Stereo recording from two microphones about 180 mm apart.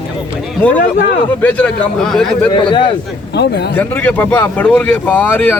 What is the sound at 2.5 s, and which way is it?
Speech, 25° left (ahead or behind).